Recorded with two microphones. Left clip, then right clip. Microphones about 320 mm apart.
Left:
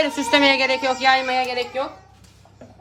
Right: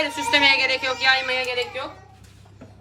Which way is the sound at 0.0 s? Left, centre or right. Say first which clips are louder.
Left 1 dB; left.